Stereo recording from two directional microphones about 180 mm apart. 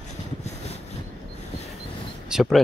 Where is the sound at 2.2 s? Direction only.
5° right (ahead or behind).